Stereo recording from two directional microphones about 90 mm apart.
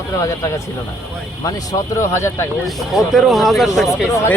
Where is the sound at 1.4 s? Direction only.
40° left (ahead or behind).